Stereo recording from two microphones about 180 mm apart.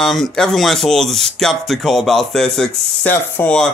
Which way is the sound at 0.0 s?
Centre (ahead or behind).